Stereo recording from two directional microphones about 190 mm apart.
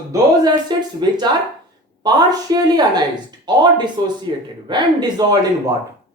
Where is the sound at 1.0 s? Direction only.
20° right (ahead or behind).